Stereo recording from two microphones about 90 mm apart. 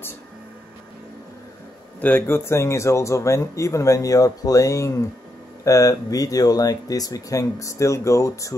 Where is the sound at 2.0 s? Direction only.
20° left (ahead or behind).